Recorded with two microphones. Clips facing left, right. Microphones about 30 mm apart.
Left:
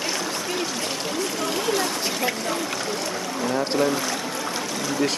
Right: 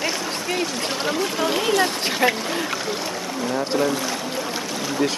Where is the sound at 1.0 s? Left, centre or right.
Right.